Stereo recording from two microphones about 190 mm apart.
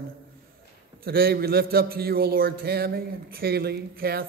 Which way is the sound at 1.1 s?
55° right (ahead or behind).